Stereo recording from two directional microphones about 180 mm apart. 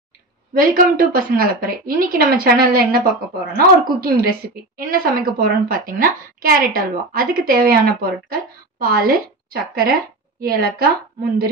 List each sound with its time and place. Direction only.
0.5 s a woman's voice: 50° right (ahead or behind)